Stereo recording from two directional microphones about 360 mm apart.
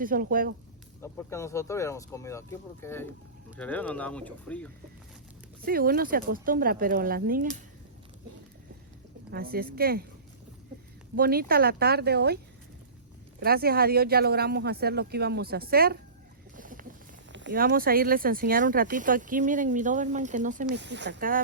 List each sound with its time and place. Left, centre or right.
0.0 s speech: right
1.0 s speech: centre
5.6 s speech: right
9.3 s speech: right
11.2 s speech: right
13.4 s speech: right
16.6 s boat: right
17.3 s speech: right